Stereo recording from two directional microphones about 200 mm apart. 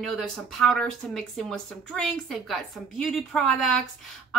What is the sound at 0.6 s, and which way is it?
A woman's voice, centre (ahead or behind).